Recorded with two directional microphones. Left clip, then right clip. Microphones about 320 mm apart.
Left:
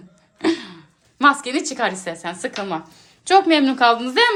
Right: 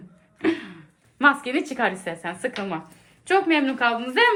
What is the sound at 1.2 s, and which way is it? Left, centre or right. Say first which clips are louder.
Speech: left 3 dB; centre.